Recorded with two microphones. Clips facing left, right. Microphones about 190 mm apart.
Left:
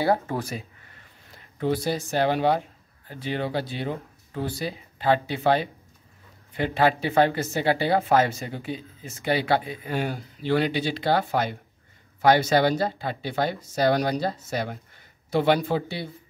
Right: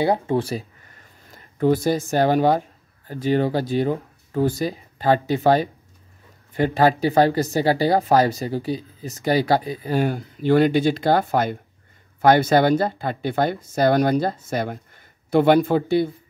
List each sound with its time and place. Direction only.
0.0 s speech: 20° right (ahead or behind)
0.4 s speech: 30° right (ahead or behind)
1.3 s speech: 45° right (ahead or behind)
10.0 s speech: 50° right (ahead or behind)